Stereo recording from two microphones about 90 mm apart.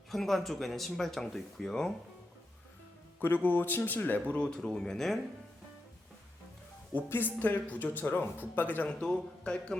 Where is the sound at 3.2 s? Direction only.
20° left (ahead or behind); by 5.2 s 5° left (ahead or behind).